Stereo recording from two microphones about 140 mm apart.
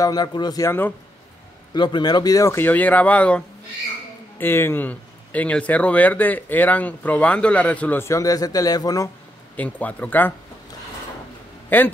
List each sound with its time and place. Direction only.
0.0 s speech: 30° left (ahead or behind)
1.7 s speech: 30° left (ahead or behind)
9.6 s speech: 10° left (ahead or behind)
11.7 s speech: 15° left (ahead or behind)